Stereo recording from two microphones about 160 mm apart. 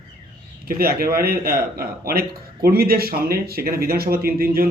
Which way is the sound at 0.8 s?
70° right (ahead or behind).